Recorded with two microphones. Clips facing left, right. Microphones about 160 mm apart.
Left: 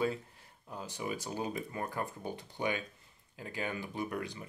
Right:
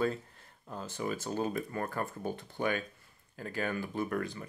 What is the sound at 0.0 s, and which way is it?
Speech, 10° left (ahead or behind).